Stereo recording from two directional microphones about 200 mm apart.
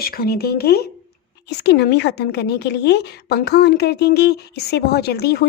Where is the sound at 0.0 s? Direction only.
50° left (ahead or behind).